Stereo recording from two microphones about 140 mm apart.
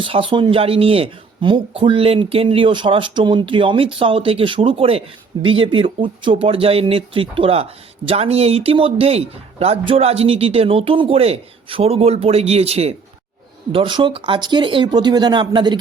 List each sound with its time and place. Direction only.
0.0 s speech: 40° right (ahead or behind)
13.7 s speech: 35° right (ahead or behind)